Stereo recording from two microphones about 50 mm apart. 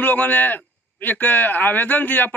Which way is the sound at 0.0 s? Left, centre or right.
Left.